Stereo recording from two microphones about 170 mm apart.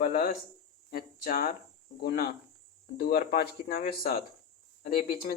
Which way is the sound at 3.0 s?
60° left (ahead or behind).